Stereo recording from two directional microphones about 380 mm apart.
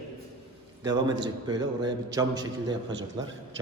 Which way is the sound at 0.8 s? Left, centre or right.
Centre.